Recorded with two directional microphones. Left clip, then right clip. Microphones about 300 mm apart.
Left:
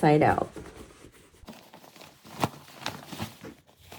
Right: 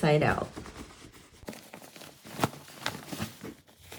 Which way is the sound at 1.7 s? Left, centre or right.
Centre.